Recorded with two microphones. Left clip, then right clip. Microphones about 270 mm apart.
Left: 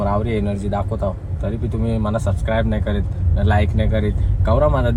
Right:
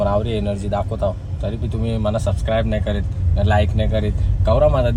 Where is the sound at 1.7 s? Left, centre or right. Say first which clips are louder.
Right 1 dB; centre.